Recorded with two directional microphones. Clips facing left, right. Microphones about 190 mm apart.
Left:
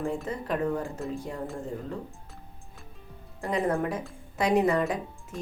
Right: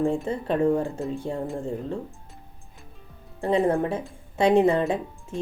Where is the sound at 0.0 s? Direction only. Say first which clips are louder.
Right 6 dB; 30° right (ahead or behind).